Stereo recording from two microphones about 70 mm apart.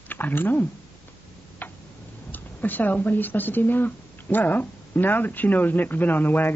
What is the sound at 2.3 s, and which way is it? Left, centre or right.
Speech, left.